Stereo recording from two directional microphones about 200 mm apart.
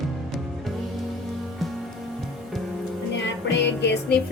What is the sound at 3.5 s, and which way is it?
Music, 60° left (ahead or behind).